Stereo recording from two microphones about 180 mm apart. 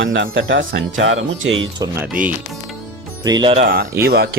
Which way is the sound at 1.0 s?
90° right.